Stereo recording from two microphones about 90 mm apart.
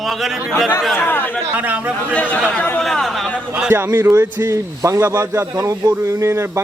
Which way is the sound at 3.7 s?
25° right (ahead or behind).